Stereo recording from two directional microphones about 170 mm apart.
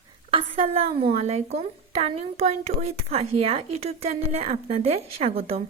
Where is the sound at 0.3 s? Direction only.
35° right (ahead or behind).